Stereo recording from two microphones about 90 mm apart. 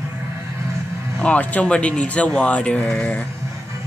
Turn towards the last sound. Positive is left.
turn(degrees=15)  # may be behind; listen again after turning